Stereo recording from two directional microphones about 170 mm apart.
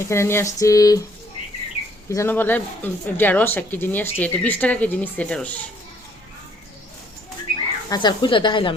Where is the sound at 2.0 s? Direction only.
15° left (ahead or behind).